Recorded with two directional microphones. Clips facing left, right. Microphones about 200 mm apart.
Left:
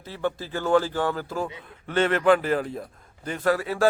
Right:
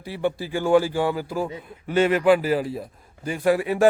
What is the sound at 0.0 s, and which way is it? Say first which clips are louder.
A man's voice: right 3 dB; 15° right (ahead or behind).